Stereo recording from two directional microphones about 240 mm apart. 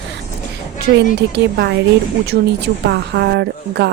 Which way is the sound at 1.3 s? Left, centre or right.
Right.